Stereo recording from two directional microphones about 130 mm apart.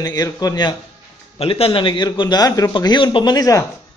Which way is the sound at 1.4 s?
45° left (ahead or behind).